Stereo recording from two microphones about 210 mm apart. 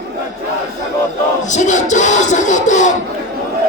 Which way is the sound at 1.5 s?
35° left (ahead or behind).